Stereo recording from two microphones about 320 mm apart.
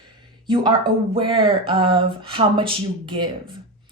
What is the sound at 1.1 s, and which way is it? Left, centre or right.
A woman's voice, centre.